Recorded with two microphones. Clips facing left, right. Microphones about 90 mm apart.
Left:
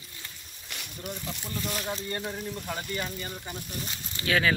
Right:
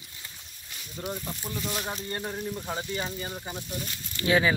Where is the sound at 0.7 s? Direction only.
70° left (ahead or behind).